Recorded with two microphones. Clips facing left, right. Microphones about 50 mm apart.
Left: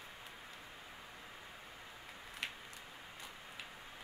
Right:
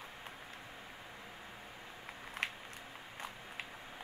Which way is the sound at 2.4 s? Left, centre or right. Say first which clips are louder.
Right 5 dB; right.